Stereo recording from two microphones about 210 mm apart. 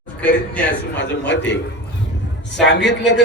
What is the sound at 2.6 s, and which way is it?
Speech, 55° left (ahead or behind).